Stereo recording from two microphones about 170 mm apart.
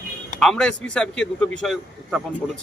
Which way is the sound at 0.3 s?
5° left (ahead or behind).